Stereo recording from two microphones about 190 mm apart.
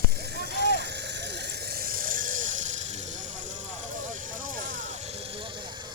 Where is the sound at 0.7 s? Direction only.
65° right (ahead or behind); by 2.9 s 45° right (ahead or behind).